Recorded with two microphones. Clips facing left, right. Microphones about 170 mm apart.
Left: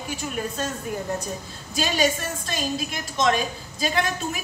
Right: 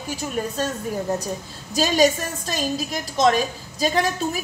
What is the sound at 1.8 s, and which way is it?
A woman's voice, 40° right (ahead or behind).